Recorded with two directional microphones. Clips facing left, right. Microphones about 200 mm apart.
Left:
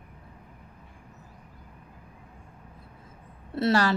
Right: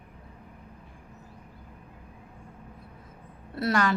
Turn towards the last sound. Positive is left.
turn(degrees=30)  # may be behind; listen again after turning